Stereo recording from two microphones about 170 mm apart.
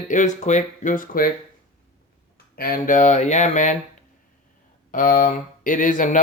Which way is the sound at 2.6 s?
55° left (ahead or behind).